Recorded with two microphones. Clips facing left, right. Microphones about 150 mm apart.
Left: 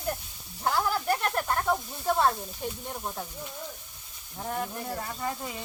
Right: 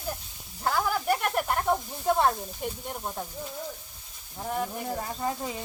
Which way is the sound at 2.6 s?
10° right (ahead or behind).